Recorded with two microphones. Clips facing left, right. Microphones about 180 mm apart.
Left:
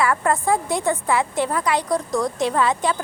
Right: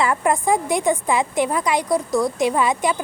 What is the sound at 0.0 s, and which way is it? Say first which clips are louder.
A woman's voice: right 1 dB; 15° right (ahead or behind).